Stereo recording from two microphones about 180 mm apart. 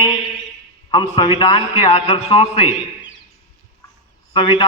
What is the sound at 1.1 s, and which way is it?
A man's voice, 30° left (ahead or behind).